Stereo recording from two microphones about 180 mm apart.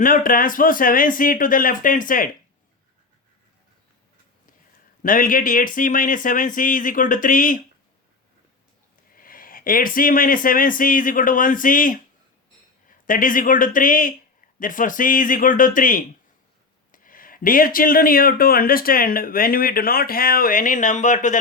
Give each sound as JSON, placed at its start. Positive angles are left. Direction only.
{"t": 0.0, "sound": "speech", "side_deg": 50}
{"t": 5.0, "sound": "speech", "side_deg": 50}
{"t": 9.1, "sound": "speech", "side_deg": 50}
{"t": 13.1, "sound": "speech", "side_deg": 50}